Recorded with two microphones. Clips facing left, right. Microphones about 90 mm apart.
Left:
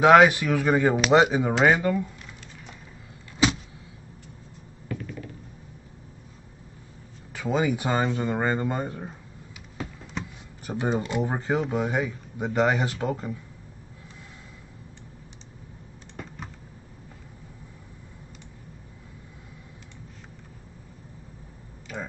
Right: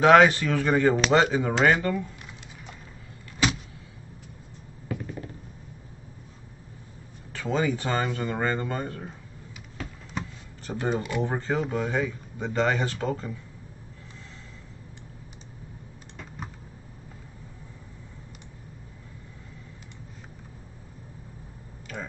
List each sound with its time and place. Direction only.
0.0 s speech: 5° left (ahead or behind)
5.0 s a sound: 30° right (ahead or behind)
7.3 s speech: 10° left (ahead or behind)
10.7 s speech: 15° left (ahead or behind)
21.9 s typing: 10° left (ahead or behind)